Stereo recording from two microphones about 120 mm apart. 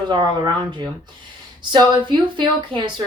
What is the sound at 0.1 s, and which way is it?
A woman's voice, 40° right (ahead or behind).